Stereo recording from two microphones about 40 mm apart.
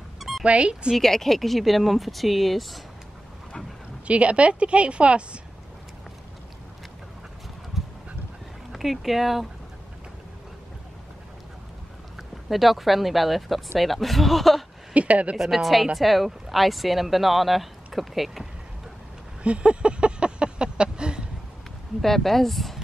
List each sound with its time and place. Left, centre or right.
0.4 s speech: right
0.9 s speech: centre
4.1 s a woman's voice: right
7.7 s duck: centre
8.7 s speech: centre
12.2 s speech: centre
15.0 s a woman's voice: right
15.3 s speech: centre
19.4 s a sound: right
22.0 s speech: centre